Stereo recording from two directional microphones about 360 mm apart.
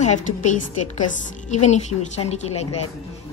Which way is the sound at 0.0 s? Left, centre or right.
Centre.